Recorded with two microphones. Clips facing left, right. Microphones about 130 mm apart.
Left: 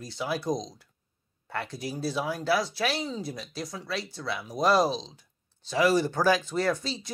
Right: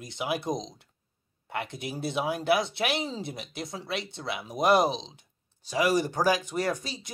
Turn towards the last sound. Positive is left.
turn(degrees=-15)  # may be behind; listen again after turning